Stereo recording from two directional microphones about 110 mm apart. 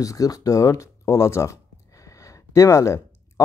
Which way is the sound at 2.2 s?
30° left (ahead or behind).